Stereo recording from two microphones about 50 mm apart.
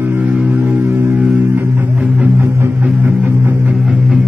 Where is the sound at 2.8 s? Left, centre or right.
Right.